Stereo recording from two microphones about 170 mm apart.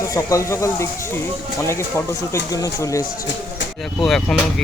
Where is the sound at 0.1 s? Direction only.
20° left (ahead or behind).